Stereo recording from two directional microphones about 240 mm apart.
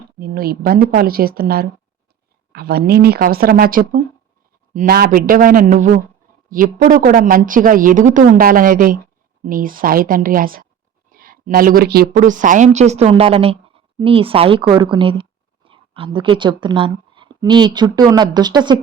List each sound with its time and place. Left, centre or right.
0.2 s a woman's voice: right; by 18.8 s centre